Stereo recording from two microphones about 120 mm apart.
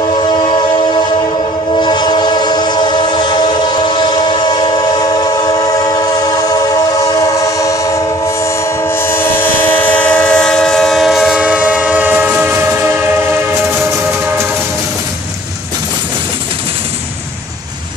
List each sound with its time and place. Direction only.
0.2 s train: 45° left (ahead or behind); by 13.0 s 20° right (ahead or behind)